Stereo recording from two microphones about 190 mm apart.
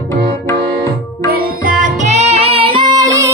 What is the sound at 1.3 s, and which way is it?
Music, 50° right (ahead or behind).